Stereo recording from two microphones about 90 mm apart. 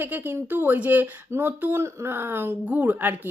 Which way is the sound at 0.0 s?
20° right (ahead or behind).